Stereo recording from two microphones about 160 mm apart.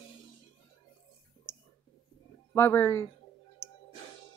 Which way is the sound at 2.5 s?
15° left (ahead or behind).